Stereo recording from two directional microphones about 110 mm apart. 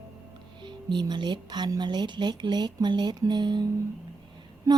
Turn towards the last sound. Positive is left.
turn(degrees=-30)  # may be behind; listen again after turning